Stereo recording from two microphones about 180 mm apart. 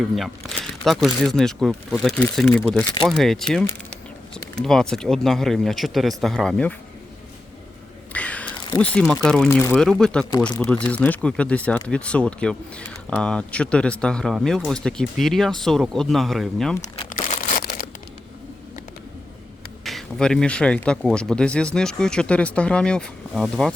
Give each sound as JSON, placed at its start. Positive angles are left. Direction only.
{"t": 0.0, "sound": "speech", "side_deg": 0}
{"t": 8.1, "sound": "a sound", "side_deg": 5}
{"t": 8.8, "sound": "speech", "side_deg": 5}
{"t": 9.5, "sound": "speech", "side_deg": 15}
{"t": 9.7, "sound": "speech", "side_deg": 5}
{"t": 17.5, "sound": "a sound", "side_deg": 55}
{"t": 19.8, "sound": "speech", "side_deg": 0}